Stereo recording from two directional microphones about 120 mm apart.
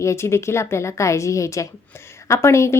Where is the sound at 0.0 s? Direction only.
25° left (ahead or behind).